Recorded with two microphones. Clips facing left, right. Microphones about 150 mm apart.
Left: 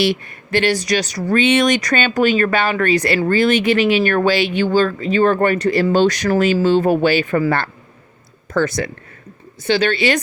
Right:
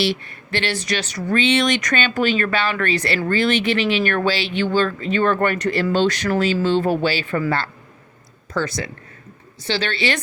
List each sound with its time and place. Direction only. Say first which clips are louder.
0.0 s speech: left 4 dB; 45° left (ahead or behind)
8.5 s speech: left 6 dB; 50° left (ahead or behind)